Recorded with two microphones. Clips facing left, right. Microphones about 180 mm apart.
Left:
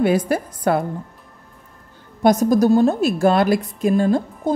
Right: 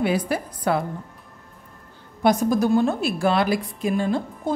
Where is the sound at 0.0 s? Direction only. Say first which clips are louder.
Left 5 dB; 45° left (ahead or behind).